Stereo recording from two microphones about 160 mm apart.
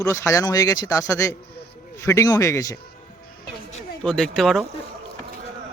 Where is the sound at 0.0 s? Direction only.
20° left (ahead or behind).